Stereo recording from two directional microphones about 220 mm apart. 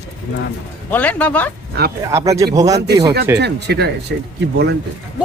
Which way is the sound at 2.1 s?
15° right (ahead or behind).